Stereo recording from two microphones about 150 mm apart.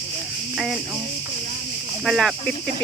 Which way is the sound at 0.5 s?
5° right (ahead or behind).